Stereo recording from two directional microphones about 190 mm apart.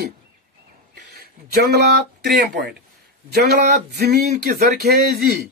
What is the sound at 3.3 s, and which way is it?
A man's voice, 55° right (ahead or behind).